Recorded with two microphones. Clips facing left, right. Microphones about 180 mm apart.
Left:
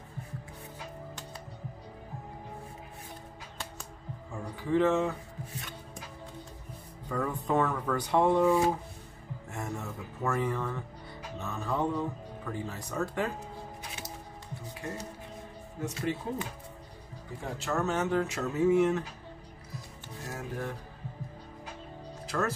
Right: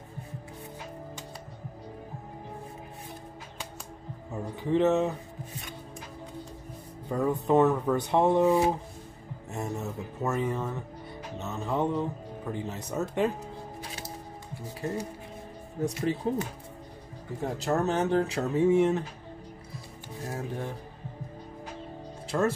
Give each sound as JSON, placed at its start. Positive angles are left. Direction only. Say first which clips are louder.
{"t": 4.3, "sound": "speech", "louder": "right 2 dB", "side_deg": -20}
{"t": 7.1, "sound": "speech", "louder": "right 5 dB", "side_deg": -20}
{"t": 15.8, "sound": "speech", "louder": "right 5 dB", "side_deg": -35}
{"t": 20.2, "sound": "music", "louder": "right 2 dB", "side_deg": -30}
{"t": 22.3, "sound": "speech", "louder": "right 5 dB", "side_deg": -25}